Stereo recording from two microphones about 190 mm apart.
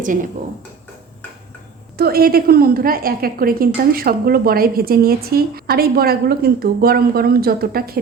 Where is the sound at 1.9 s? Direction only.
55° right (ahead or behind).